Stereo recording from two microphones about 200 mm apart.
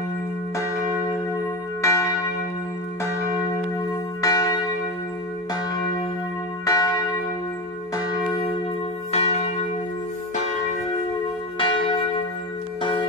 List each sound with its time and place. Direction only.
1.8 s church bell: 15° left (ahead or behind)
4.2 s church bell: 15° left (ahead or behind)
6.6 s church bell: 15° left (ahead or behind)
9.1 s church bell: 30° left (ahead or behind)
11.5 s church bell: 25° left (ahead or behind)